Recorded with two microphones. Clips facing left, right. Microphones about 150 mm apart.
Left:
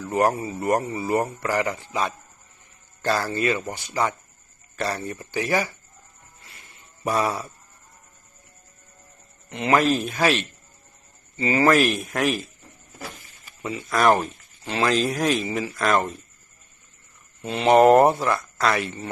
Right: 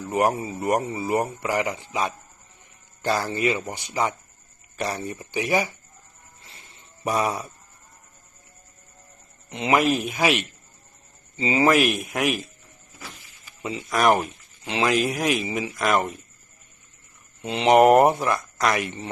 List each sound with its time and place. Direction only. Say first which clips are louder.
0.0 s speech: left 1 dB; 15° right (ahead or behind)
6.4 s a sound: even; 25° right (ahead or behind)
9.5 s speech: left 1 dB; 15° right (ahead or behind)
13.6 s speech: left 1 dB; 20° right (ahead or behind)
17.4 s speech: even; 20° right (ahead or behind)